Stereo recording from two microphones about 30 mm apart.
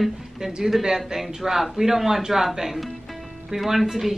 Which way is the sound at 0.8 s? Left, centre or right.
Centre.